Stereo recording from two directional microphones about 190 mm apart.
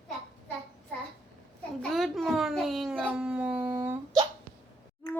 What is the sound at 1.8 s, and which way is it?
Howl, centre (ahead or behind).